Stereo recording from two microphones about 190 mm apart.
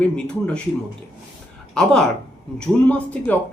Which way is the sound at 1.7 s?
5° left (ahead or behind).